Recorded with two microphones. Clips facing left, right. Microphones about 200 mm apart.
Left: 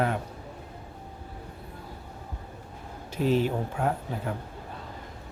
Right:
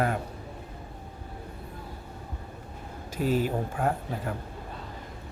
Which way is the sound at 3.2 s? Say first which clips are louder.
Left 2 dB; 50° right (ahead or behind).